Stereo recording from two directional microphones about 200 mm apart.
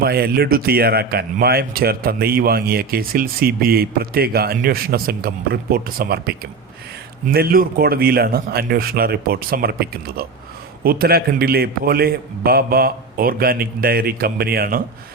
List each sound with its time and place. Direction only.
0.0 s speech: 50° right (ahead or behind)